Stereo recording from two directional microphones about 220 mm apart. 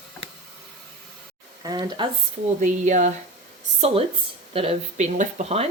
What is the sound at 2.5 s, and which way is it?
Speech, 35° right (ahead or behind).